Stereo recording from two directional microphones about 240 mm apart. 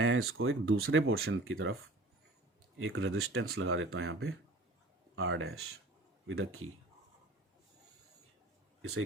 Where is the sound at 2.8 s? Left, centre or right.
Right.